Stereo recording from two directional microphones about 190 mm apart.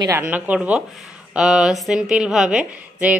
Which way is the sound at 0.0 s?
15° right (ahead or behind).